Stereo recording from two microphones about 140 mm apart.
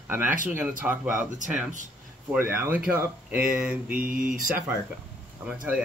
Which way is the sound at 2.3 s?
15° right (ahead or behind).